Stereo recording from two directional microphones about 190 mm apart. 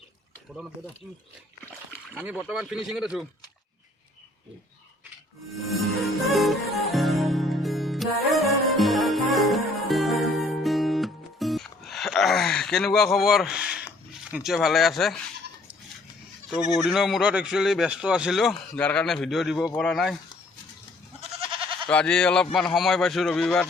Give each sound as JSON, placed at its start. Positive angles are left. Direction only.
{"t": 2.1, "sound": "speech", "side_deg": -5}
{"t": 6.2, "sound": "music", "side_deg": 0}
{"t": 14.3, "sound": "speech", "side_deg": -5}
{"t": 16.5, "sound": "speech", "side_deg": 0}
{"t": 21.2, "sound": "goat", "side_deg": -30}
{"t": 21.8, "sound": "speech", "side_deg": 5}